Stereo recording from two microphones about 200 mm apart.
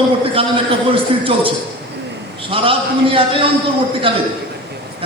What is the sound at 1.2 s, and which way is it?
A man's voice, 25° right (ahead or behind).